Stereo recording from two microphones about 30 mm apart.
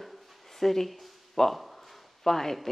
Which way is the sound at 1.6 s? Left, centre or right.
Centre.